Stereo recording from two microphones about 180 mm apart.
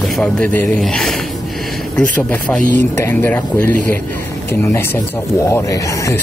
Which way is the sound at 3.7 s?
45° right (ahead or behind).